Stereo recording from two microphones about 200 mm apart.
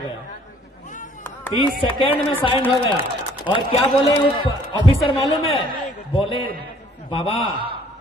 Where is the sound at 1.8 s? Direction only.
25° left (ahead or behind).